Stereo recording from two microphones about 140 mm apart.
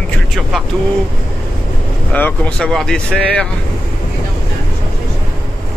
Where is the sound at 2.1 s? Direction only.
10° left (ahead or behind).